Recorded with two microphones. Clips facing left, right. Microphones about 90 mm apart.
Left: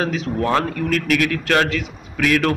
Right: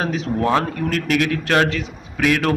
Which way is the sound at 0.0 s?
30° right (ahead or behind).